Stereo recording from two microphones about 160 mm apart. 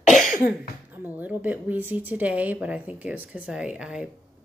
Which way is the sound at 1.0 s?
10° right (ahead or behind).